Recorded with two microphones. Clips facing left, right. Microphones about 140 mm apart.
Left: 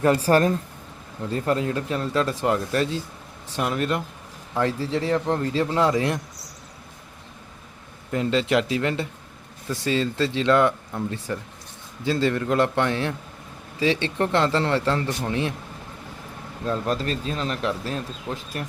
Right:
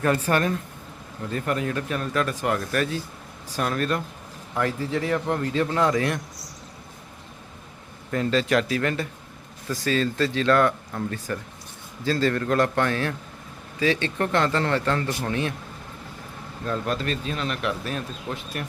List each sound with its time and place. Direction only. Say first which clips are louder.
0.2 s speech: left 4 dB; 35° left (ahead or behind); by 4.0 s 20° left (ahead or behind)
4.5 s speech: left 2 dB; 30° left (ahead or behind)
8.1 s speech: left 1 dB; 20° left (ahead or behind)
16.8 s speech: left 1 dB; 35° left (ahead or behind)